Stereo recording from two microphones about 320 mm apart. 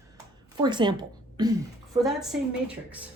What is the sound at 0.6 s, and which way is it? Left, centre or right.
Speech, centre.